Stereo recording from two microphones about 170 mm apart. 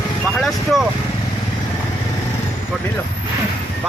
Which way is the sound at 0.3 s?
Centre (ahead or behind).